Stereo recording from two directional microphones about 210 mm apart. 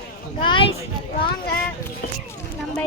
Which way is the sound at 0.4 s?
25° left (ahead or behind).